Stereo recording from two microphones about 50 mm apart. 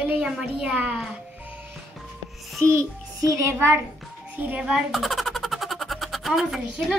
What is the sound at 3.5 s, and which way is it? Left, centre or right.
Speech, right.